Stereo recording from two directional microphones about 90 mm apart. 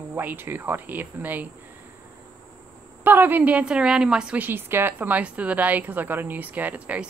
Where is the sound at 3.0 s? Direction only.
20° right (ahead or behind).